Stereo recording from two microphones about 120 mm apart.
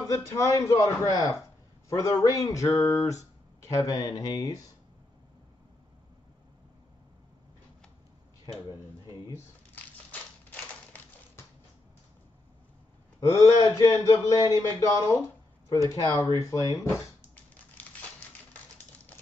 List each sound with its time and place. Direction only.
0.1 s speech: 25° left (ahead or behind)
10.5 s typewriter: 15° left (ahead or behind)
13.3 s speech: 30° left (ahead or behind)
14.9 s a sound: 20° left (ahead or behind)
15.9 s speech: 30° left (ahead or behind)